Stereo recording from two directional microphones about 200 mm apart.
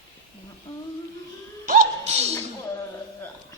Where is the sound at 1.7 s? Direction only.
35° right (ahead or behind).